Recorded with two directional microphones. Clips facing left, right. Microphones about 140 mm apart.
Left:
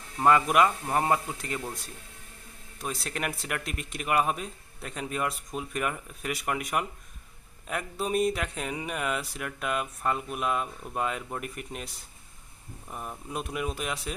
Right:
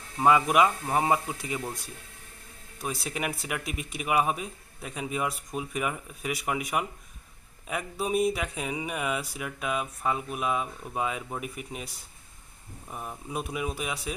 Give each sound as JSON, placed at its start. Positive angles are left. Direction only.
{"t": 0.2, "sound": "a man's voice", "side_deg": -5}
{"t": 2.8, "sound": "speech", "side_deg": -5}
{"t": 12.9, "sound": "speech", "side_deg": 0}